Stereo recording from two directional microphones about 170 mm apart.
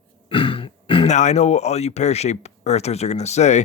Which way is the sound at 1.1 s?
45° left (ahead or behind).